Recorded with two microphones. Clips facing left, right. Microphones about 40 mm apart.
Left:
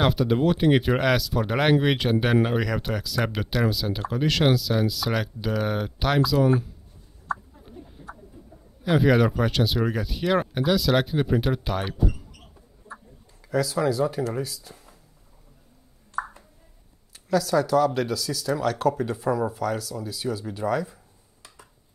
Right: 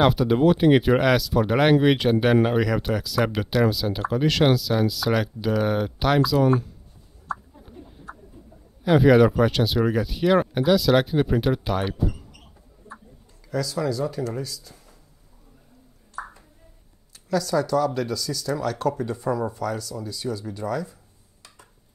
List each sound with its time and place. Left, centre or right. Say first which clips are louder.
0.0 s speech: right 3 dB; centre
8.8 s speech: right 4 dB; centre
13.4 s speech: left 2 dB; centre
17.1 s speech: left 1 dB; centre
20.5 s a sound: left 2 dB; left